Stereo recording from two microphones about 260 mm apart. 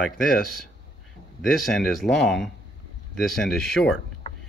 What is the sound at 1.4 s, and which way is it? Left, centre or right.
Speech, centre.